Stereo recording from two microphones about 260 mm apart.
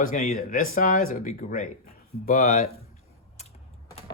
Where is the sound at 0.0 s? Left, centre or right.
Left.